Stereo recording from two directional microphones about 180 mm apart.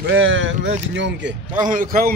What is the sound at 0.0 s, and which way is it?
Speech, 90° right.